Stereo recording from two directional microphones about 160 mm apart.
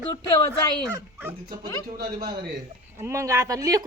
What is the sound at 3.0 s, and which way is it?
Speech, 20° right (ahead or behind).